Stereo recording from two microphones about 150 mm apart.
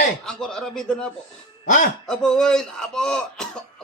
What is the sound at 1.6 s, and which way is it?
Speech, 60° left (ahead or behind).